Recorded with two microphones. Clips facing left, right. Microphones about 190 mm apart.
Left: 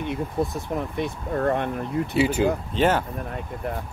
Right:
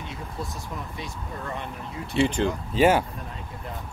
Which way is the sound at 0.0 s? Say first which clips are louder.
Left 10 dB; 60° left (ahead or behind).